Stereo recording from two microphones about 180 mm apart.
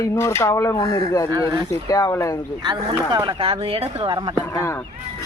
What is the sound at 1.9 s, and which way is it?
Speech, 15° left (ahead or behind).